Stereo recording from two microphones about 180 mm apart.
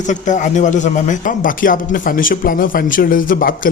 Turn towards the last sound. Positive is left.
turn(degrees=50)  # may be behind; listen again after turning